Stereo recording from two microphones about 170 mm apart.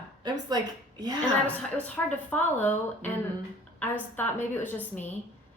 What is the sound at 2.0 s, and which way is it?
A woman's voice, 10° left (ahead or behind).